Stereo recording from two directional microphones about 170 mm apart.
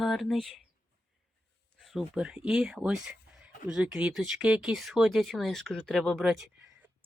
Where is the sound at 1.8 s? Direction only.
Centre (ahead or behind).